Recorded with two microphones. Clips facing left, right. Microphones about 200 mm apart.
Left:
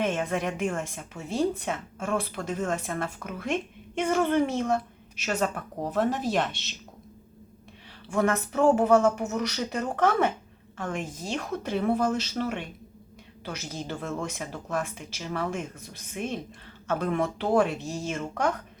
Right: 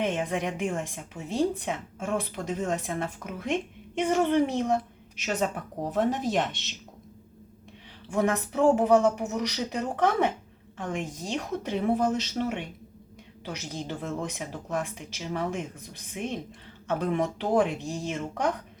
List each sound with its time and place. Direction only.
0.0 s a woman's voice: 15° right (ahead or behind)
8.1 s a woman's voice: 15° right (ahead or behind)